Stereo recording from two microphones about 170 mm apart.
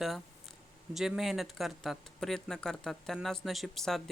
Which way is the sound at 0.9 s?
Centre (ahead or behind).